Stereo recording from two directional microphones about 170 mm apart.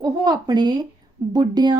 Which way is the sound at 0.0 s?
25° right (ahead or behind).